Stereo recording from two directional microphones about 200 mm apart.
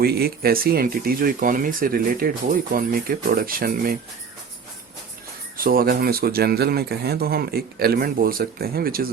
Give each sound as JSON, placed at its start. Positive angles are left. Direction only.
{"t": 0.0, "sound": "speech", "side_deg": -50}
{"t": 5.5, "sound": "speech", "side_deg": -45}